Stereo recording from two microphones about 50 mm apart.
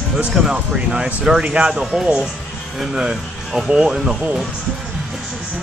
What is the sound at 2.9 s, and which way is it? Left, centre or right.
Speech, centre.